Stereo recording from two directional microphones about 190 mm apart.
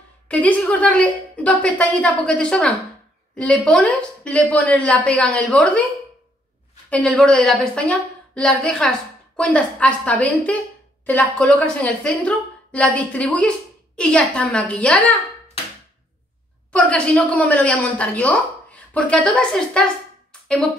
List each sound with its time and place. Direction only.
0.3 s a woman's voice: 5° left (ahead or behind)
6.9 s a woman's voice: 5° left (ahead or behind)
16.7 s a woman's voice: 5° left (ahead or behind)